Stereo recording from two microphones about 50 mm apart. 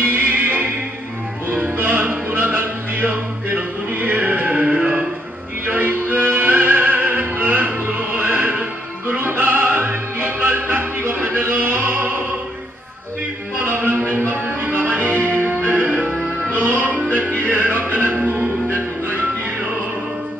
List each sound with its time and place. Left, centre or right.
0.0 s music: right
5.7 s music: right
14.2 s music: right
17.3 s music: left
18.1 s music: right